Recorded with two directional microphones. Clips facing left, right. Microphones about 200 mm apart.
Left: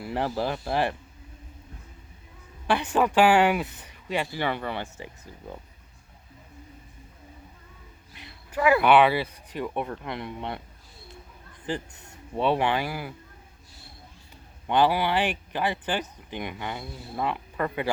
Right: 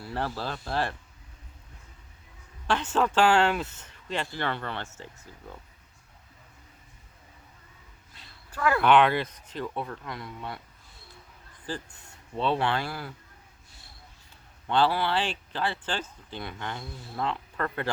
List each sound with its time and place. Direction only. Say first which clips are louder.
0.0 s speech: left 5 dB; 15° left (ahead or behind)
2.6 s speech: left 2 dB; 15° left (ahead or behind)
8.1 s speech: left 11 dB; 15° left (ahead or behind)
11.7 s speech: left 5 dB; 20° left (ahead or behind)
14.7 s speech: left 2 dB; 15° left (ahead or behind)